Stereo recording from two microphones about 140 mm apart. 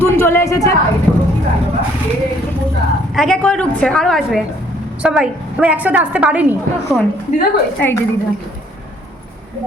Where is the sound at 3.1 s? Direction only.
5° left (ahead or behind).